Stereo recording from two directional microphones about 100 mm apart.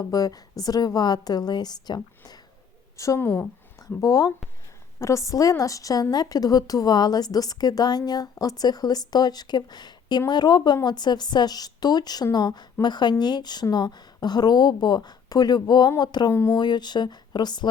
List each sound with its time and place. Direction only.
0.1 s a woman's voice: 40° left (ahead or behind)
3.0 s a woman's voice: 30° left (ahead or behind)
4.0 s a woman's voice: 35° left (ahead or behind)
16.3 s a woman's voice: 30° left (ahead or behind)
16.6 s a woman's voice: 45° left (ahead or behind)